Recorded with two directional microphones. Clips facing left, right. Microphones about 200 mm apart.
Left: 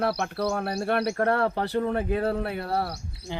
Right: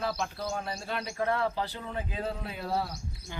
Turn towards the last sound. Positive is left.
turn(degrees=70)  # may be behind; listen again after turning